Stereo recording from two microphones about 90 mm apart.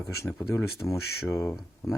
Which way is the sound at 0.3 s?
35° left (ahead or behind).